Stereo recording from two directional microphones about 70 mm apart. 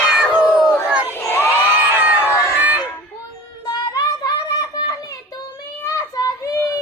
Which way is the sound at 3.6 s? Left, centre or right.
Left.